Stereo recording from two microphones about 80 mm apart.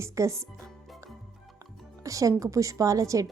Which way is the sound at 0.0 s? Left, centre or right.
Right.